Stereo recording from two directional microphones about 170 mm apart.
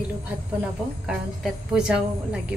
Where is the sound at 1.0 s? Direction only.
5° right (ahead or behind).